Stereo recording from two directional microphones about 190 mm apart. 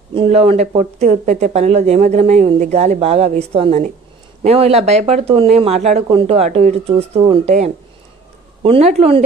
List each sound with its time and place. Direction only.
0.1 s speech: 30° right (ahead or behind)